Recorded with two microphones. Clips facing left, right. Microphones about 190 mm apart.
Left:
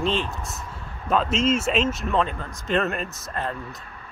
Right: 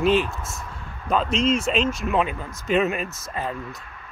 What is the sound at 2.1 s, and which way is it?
Speech, 10° right (ahead or behind).